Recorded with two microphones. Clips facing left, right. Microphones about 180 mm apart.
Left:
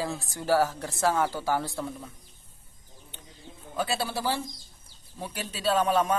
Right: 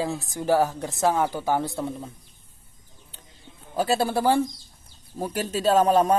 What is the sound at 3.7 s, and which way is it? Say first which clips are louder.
Speech: right 7 dB; 40° right (ahead or behind).